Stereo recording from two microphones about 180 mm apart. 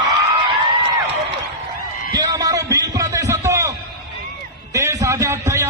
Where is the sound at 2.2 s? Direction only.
20° right (ahead or behind).